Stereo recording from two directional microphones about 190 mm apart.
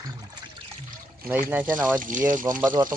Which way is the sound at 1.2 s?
10° right (ahead or behind).